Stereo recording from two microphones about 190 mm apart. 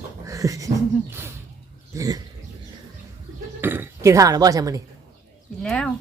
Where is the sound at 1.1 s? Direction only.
15° right (ahead or behind).